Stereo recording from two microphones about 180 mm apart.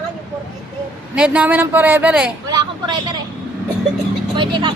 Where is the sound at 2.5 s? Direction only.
25° right (ahead or behind).